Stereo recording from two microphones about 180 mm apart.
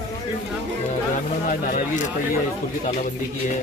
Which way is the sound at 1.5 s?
45° left (ahead or behind).